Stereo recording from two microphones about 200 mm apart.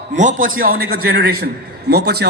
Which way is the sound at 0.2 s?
40° right (ahead or behind).